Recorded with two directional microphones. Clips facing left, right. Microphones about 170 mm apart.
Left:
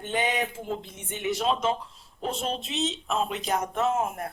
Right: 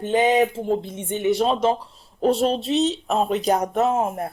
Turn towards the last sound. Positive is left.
turn(degrees=-35)  # may be behind; listen again after turning